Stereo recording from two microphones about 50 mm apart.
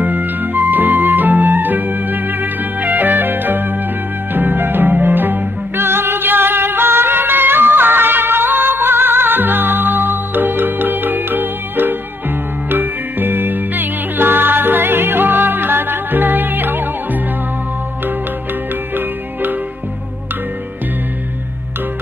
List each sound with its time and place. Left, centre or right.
0.0 s music: right